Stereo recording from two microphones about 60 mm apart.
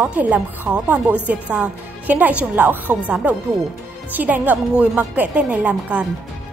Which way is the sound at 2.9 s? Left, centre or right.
Right.